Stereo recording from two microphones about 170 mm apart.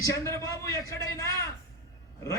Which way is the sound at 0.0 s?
20° left (ahead or behind).